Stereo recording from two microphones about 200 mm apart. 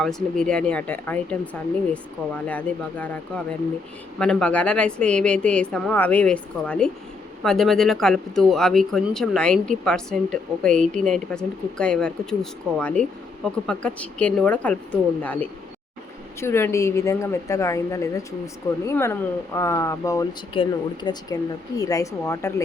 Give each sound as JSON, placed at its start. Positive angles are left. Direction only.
{"t": 0.0, "sound": "speech", "side_deg": 5}